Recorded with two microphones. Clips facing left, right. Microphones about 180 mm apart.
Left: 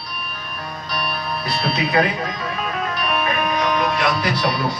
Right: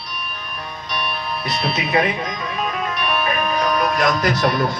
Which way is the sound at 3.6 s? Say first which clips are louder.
Right 2 dB; 40° right (ahead or behind).